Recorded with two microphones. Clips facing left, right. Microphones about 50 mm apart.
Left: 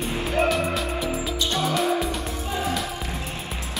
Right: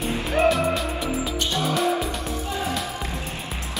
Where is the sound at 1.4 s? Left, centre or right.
Left.